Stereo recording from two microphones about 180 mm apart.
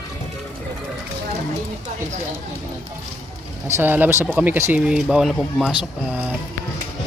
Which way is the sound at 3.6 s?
10° right (ahead or behind).